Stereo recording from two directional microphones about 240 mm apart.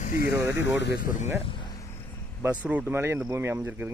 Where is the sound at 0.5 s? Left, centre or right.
Left.